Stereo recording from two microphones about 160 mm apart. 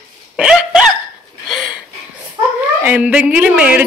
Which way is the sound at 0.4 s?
5° right (ahead or behind).